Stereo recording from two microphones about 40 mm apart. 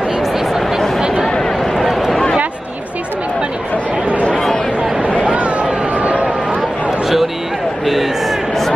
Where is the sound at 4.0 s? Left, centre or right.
Right.